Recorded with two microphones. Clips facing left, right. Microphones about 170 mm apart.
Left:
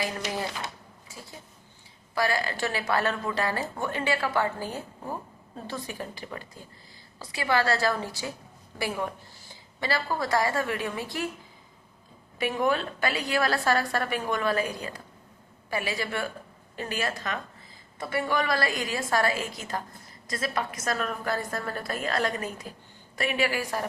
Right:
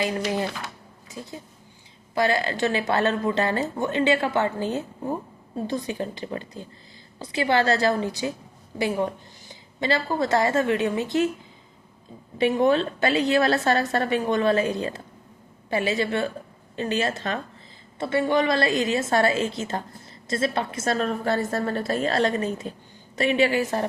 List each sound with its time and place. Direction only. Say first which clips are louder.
1.0 s a woman's voice: right 9 dB; 20° right (ahead or behind)
12.4 s a woman's voice: right 6 dB; 25° right (ahead or behind)